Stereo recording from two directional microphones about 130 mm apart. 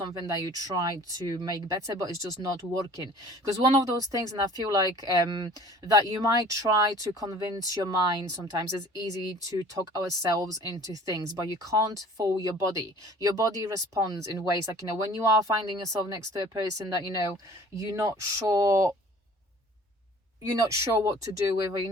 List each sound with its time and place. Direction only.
0.0 s speech: 25° right (ahead or behind)
20.4 s speech: 25° right (ahead or behind)